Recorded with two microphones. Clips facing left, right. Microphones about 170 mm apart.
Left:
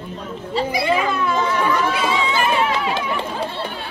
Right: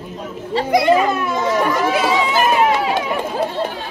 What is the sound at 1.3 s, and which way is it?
Chatter, 10° right (ahead or behind).